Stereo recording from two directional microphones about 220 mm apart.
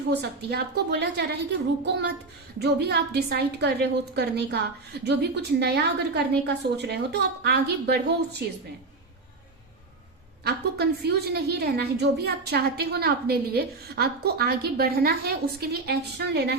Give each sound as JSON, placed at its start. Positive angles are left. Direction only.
{"t": 0.1, "sound": "a woman's voice", "side_deg": -50}
{"t": 10.4, "sound": "a woman's voice", "side_deg": -45}